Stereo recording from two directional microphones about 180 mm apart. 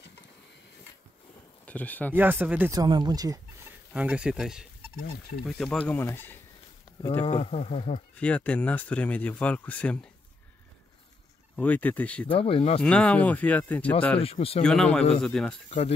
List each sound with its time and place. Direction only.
1.7 s speech: 10° left (ahead or behind)
2.1 s speech: 10° right (ahead or behind)
2.7 s speech: 20° right (ahead or behind)
3.9 s speech: 5° right (ahead or behind); by 6.3 s 10° left (ahead or behind)
7.3 s speech: 30° left (ahead or behind)
8.2 s speech: 5° left (ahead or behind)
11.6 s speech: 10° left (ahead or behind)
12.3 s speech: 30° left (ahead or behind)
12.8 s speech: 5° left (ahead or behind)
14.2 s speech: 35° left (ahead or behind)
14.6 s speech: 5° left (ahead or behind)